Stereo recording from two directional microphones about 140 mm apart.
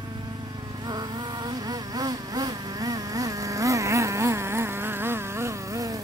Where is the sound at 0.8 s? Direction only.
30° right (ahead or behind).